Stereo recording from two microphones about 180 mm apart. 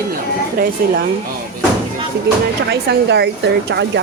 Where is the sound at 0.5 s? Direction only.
55° right (ahead or behind).